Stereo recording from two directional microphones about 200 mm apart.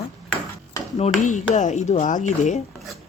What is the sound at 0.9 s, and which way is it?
Speech, 35° left (ahead or behind).